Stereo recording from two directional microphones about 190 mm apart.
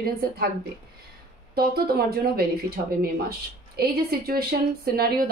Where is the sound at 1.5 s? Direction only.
55° right (ahead or behind).